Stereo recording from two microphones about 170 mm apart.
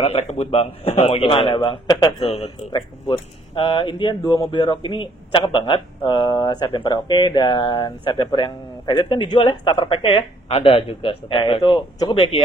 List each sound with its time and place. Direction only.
0.0 s a man's voice: 35° left (ahead or behind)
2.2 s a man's voice: 40° left (ahead or behind)